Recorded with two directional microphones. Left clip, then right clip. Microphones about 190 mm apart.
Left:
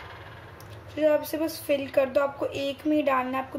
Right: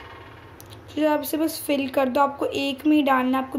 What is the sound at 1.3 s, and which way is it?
A woman's voice, 45° right (ahead or behind).